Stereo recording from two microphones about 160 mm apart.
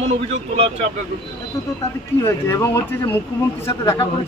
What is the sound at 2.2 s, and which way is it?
Speech, 15° left (ahead or behind).